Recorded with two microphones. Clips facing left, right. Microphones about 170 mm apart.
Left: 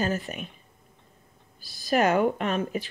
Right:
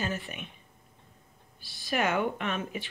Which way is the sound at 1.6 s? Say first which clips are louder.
Left 6 dB; 40° left (ahead or behind).